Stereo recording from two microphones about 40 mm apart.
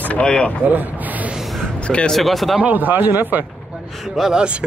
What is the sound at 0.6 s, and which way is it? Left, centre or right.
Speech, right.